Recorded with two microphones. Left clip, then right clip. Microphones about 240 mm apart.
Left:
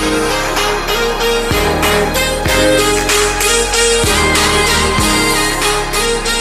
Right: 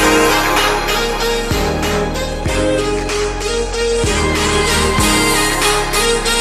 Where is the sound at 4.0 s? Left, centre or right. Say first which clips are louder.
Left 4 dB; centre.